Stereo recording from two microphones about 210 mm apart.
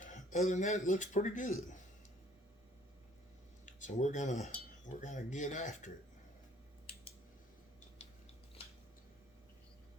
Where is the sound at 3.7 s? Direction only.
35° left (ahead or behind).